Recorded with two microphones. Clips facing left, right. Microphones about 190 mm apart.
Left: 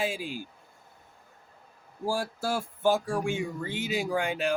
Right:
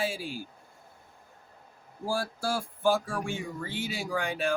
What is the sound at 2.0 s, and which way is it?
Speech, 15° left (ahead or behind).